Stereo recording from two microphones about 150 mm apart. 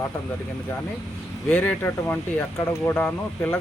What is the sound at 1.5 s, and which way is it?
Speech, 15° left (ahead or behind).